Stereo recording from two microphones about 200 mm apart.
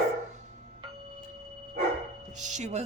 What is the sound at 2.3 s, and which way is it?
Speech, 35° right (ahead or behind).